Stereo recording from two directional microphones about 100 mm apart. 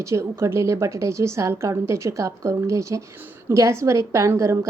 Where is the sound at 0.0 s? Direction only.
30° right (ahead or behind).